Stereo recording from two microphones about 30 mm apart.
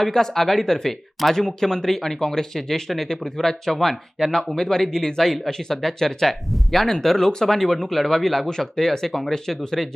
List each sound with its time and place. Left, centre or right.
0.1 s speech: centre